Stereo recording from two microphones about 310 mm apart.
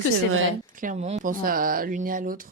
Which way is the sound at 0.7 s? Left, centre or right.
Right.